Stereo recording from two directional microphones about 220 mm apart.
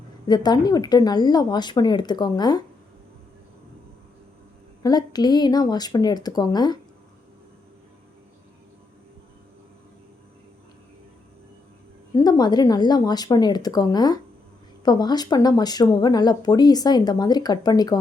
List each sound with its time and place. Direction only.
0.3 s speech: 20° left (ahead or behind)
4.8 s speech: 20° left (ahead or behind)
12.1 s speech: 20° left (ahead or behind)